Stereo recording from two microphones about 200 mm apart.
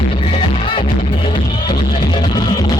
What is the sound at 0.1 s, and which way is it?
Music, 30° left (ahead or behind).